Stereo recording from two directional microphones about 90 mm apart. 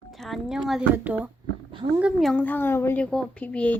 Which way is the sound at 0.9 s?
15° right (ahead or behind).